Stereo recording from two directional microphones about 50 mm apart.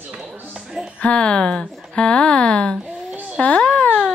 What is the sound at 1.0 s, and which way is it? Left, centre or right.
A child's voice, left.